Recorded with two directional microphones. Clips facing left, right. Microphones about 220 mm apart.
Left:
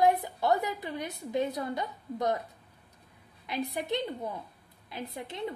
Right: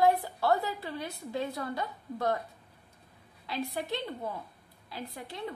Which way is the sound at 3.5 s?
20° left (ahead or behind).